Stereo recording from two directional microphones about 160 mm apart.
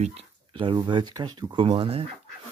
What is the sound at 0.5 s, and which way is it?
Speech, 30° right (ahead or behind).